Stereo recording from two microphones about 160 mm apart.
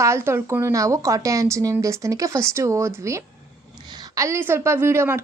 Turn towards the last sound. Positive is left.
turn(degrees=-15)  # may be behind; listen again after turning